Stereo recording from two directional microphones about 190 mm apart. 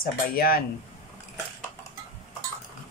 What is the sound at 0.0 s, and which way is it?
Speech, 50° left (ahead or behind).